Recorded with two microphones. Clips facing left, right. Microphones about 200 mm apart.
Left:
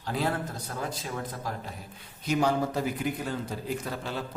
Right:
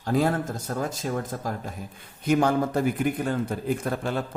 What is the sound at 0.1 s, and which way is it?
A man's voice, 45° right (ahead or behind).